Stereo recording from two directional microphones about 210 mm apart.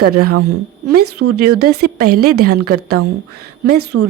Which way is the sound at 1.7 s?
50° right (ahead or behind).